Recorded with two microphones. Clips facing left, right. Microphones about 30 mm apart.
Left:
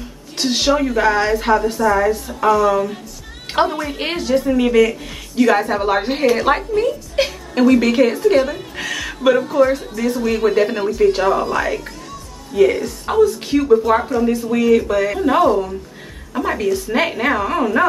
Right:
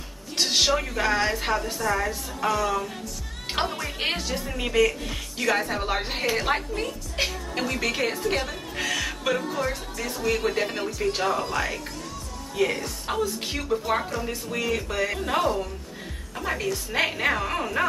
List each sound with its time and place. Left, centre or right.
0.4 s a woman's voice: centre
13.8 s a woman's voice: centre